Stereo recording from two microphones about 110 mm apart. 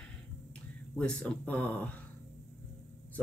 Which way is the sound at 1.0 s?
5° left (ahead or behind).